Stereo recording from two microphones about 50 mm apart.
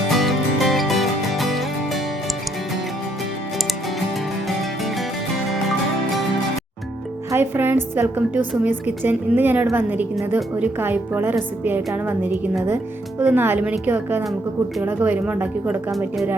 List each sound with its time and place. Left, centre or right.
0.1 s music: centre
7.3 s a woman's voice: right
11.2 s a woman's voice: right
13.3 s a woman's voice: right
13.6 s a woman's voice: right
13.9 s a woman's voice: right